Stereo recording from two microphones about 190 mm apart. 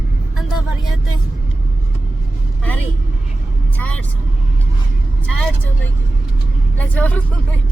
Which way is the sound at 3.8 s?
5° left (ahead or behind).